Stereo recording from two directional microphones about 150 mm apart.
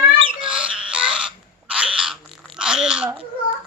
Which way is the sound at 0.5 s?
5° right (ahead or behind).